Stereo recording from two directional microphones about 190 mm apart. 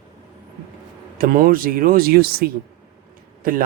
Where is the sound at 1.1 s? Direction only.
50° right (ahead or behind).